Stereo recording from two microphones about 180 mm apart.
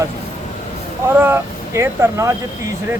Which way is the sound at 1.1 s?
10° right (ahead or behind).